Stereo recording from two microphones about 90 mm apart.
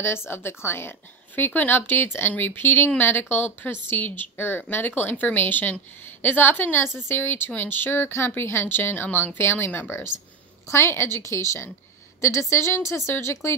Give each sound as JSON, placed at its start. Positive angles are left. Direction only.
{"t": 0.3, "sound": "speech", "side_deg": 25}